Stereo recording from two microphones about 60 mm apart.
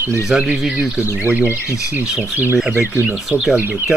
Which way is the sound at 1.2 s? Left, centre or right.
Right.